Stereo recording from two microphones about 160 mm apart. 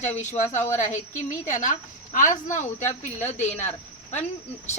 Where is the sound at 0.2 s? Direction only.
50° left (ahead or behind).